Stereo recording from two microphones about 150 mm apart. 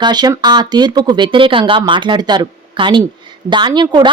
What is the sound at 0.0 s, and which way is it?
Speech, 30° right (ahead or behind).